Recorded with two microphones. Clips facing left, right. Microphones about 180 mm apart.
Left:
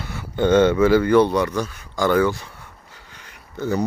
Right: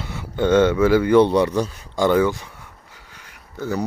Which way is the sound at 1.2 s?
25° right (ahead or behind).